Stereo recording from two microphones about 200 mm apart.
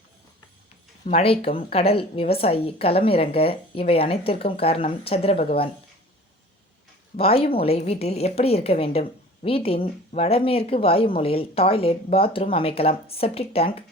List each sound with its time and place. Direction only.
1.0 s a woman's voice: 30° left (ahead or behind)
7.2 s a woman's voice: 30° left (ahead or behind)